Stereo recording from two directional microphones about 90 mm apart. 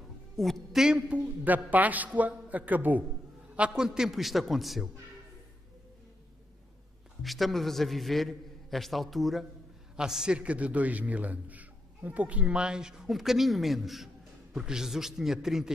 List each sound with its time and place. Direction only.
0.4 s a man's voice: centre (ahead or behind)
0.8 s a man's voice: 10° right (ahead or behind)
7.2 s a man's voice: centre (ahead or behind)